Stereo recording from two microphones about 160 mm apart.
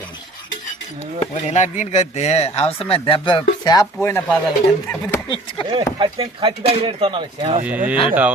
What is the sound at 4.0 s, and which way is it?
Speech, 15° left (ahead or behind).